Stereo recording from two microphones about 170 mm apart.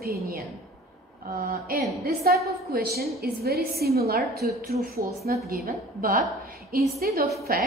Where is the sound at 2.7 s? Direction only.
65° right (ahead or behind).